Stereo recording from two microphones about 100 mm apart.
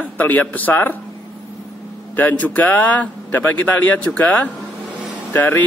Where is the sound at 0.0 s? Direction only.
15° left (ahead or behind).